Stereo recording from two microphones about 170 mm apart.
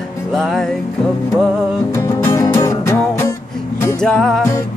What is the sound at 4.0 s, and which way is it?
Music, 5° left (ahead or behind).